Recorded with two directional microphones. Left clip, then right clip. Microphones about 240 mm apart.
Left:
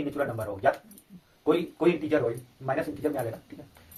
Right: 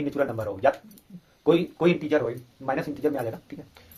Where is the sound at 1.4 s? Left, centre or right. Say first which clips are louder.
Right 3 dB; right.